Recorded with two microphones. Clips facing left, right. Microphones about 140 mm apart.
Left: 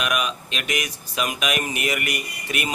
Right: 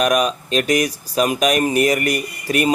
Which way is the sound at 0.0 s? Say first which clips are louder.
Right 8 dB; 40° right (ahead or behind).